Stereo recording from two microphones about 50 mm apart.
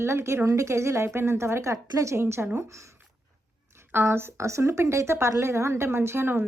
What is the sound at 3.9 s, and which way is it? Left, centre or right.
Speech, right.